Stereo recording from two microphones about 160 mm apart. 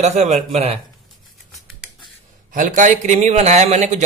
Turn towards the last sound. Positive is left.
turn(degrees=-45)  # may be behind; listen again after turning